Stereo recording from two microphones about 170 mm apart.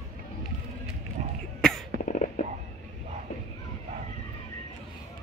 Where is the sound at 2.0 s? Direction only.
50° left (ahead or behind).